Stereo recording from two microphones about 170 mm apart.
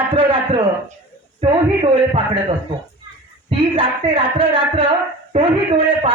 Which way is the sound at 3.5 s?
30° right (ahead or behind).